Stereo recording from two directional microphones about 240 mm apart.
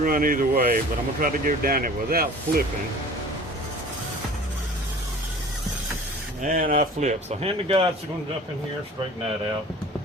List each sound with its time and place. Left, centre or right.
0.0 s speech: right
6.4 s speech: right